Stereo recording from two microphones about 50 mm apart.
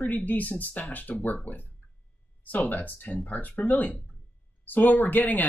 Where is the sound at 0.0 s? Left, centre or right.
Left.